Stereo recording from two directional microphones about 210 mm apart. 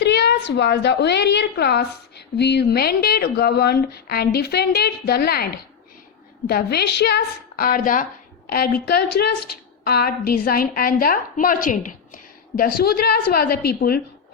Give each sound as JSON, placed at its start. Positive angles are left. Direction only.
{"t": 0.0, "sound": "a woman's voice", "side_deg": 55}
{"t": 6.5, "sound": "a woman's voice", "side_deg": 50}